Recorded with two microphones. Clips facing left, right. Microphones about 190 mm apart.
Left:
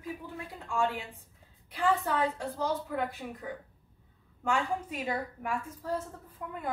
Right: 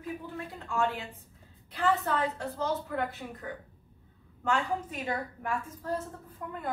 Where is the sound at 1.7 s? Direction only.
10° left (ahead or behind).